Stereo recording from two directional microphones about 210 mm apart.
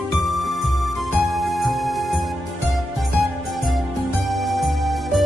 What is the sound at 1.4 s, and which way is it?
Music, centre (ahead or behind).